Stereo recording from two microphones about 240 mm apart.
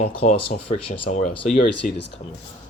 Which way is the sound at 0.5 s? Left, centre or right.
Left.